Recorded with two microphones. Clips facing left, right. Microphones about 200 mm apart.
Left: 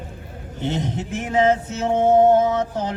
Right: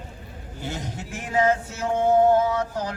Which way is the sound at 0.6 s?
20° left (ahead or behind).